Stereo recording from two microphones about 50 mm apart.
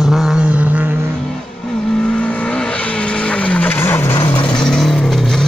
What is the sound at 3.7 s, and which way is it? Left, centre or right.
Vehicle, left.